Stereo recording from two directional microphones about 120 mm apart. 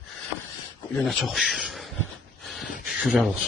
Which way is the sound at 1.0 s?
Centre (ahead or behind).